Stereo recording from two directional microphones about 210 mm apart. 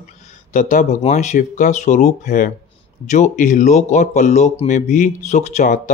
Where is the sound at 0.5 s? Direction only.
35° left (ahead or behind).